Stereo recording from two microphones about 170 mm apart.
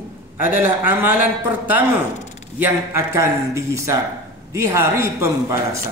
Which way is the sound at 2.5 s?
15° right (ahead or behind).